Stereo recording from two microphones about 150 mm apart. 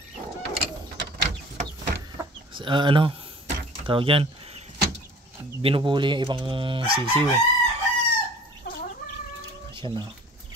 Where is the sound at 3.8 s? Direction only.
35° right (ahead or behind).